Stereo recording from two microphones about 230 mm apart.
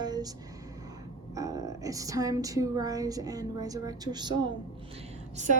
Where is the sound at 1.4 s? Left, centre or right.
Centre.